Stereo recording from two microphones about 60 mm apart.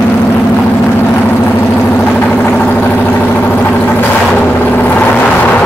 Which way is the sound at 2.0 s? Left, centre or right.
Left.